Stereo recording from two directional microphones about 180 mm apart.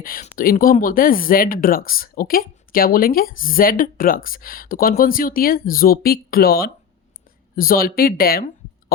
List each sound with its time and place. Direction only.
0.0 s speech: 50° left (ahead or behind)